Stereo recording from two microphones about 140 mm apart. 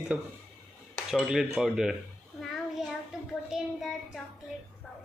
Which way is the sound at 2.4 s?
Centre (ahead or behind).